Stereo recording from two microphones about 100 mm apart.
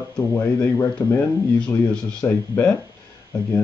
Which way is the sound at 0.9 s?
15° left (ahead or behind).